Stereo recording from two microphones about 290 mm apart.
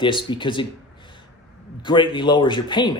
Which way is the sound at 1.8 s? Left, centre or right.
Centre.